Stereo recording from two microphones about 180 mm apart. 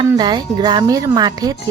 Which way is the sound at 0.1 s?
25° right (ahead or behind).